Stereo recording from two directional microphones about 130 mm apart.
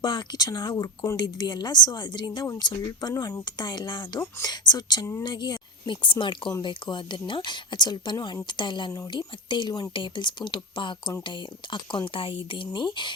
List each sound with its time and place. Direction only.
0.0 s speech: 35° left (ahead or behind)
3.1 s speech: 25° left (ahead or behind)